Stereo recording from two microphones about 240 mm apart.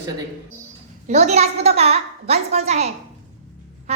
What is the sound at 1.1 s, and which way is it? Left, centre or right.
A woman's voice, right.